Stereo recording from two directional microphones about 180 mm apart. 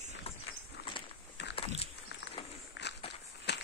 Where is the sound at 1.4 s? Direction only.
75° left (ahead or behind).